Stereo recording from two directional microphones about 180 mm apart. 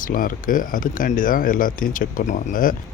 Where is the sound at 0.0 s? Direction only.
50° left (ahead or behind).